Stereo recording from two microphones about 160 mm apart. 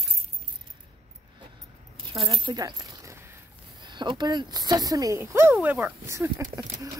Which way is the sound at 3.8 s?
30° right (ahead or behind).